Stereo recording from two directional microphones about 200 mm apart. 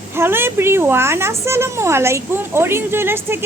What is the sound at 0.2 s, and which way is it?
Speech, 10° right (ahead or behind).